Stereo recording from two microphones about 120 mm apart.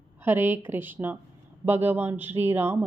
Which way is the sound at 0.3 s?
20° right (ahead or behind).